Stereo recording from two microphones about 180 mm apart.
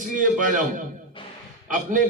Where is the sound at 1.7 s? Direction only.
45° right (ahead or behind).